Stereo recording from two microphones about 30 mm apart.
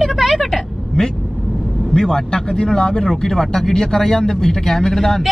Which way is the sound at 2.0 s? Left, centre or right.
Left.